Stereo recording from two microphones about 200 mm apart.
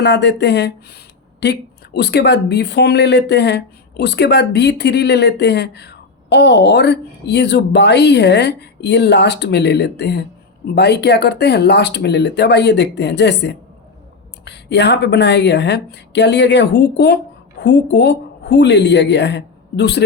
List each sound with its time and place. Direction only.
0.0 s a woman's voice: 60° left (ahead or behind)